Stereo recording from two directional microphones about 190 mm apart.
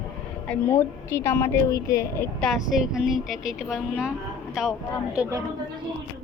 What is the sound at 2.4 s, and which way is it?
A woman's voice, centre (ahead or behind).